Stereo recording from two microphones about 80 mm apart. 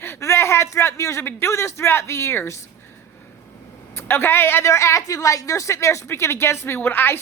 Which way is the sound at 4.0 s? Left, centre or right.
Left.